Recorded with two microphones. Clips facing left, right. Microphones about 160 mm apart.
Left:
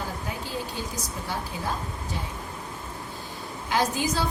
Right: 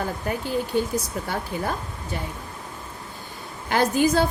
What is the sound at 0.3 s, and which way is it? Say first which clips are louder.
A woman's voice: right 7 dB; 60° right (ahead or behind).